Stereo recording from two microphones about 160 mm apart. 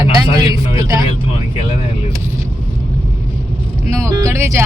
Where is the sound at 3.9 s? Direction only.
20° right (ahead or behind).